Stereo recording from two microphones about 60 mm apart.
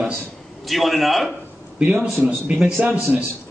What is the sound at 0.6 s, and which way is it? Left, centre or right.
Speech, centre.